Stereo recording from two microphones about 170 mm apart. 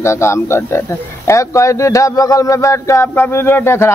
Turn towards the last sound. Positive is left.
turn(degrees=15)  # may be behind; listen again after turning